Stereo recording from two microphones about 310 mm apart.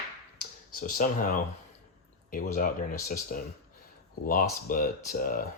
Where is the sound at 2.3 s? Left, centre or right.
Left.